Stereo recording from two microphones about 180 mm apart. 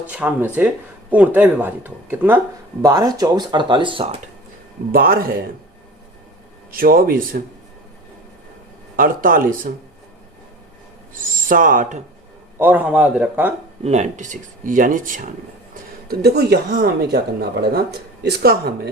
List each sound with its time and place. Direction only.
0.1 s speech: 10° right (ahead or behind)
2.8 s speech: 20° right (ahead or behind)
4.9 s speech: 55° right (ahead or behind)
6.7 s speech: 55° right (ahead or behind)
9.0 s speech: 50° right (ahead or behind)
11.1 s owl: 50° right (ahead or behind)
12.5 s speech: 10° right (ahead or behind)
13.8 s speech: 40° right (ahead or behind)
15.7 s speech: 60° right (ahead or behind)